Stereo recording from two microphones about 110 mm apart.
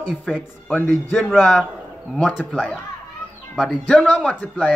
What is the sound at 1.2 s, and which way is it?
Speech, 5° left (ahead or behind).